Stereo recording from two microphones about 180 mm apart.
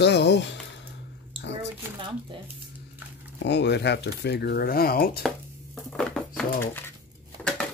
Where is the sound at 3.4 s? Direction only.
75° left (ahead or behind); by 5.2 s 55° left (ahead or behind).